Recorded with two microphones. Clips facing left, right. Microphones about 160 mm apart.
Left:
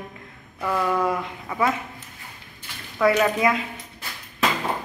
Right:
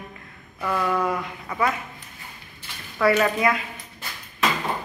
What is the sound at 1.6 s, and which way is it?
A woman's voice, 20° left (ahead or behind).